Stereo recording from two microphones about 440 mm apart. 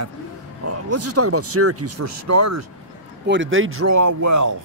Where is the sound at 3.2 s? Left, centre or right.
Right.